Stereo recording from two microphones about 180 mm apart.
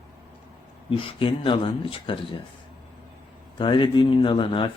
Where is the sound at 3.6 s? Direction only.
25° left (ahead or behind).